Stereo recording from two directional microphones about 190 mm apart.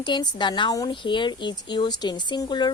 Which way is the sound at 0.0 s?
25° left (ahead or behind).